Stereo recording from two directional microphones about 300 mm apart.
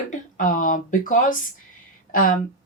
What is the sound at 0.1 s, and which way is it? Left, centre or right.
A woman's voice, left.